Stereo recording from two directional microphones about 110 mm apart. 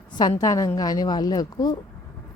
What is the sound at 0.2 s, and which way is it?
A woman's voice, 35° left (ahead or behind).